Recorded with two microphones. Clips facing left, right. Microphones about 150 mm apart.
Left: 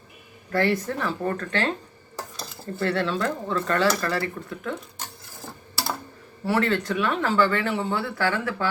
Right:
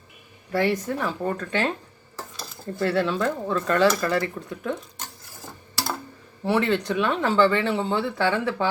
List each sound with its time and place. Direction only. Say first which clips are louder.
0.5 s speech: even; 10° right (ahead or behind)
6.4 s speech: right 1 dB; 20° right (ahead or behind)